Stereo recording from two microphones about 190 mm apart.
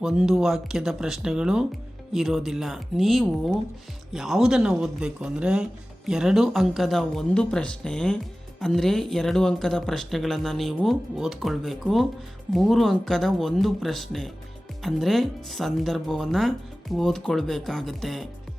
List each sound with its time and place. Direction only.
0.0 s speech: 5° right (ahead or behind)